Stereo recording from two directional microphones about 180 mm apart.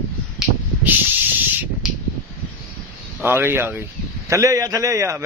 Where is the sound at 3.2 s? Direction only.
15° right (ahead or behind).